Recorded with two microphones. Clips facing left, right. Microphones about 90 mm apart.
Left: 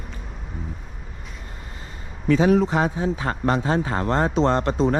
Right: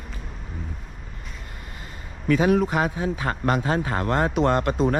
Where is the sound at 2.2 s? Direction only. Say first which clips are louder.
Left 2 dB; 35° left (ahead or behind).